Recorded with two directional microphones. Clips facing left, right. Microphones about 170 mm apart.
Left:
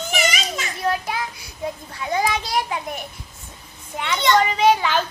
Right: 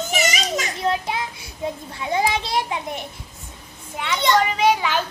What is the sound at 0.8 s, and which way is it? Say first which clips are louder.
A child's voice: left 2 dB; 25° right (ahead or behind).